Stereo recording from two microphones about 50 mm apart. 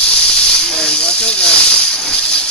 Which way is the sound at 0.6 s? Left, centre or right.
Centre.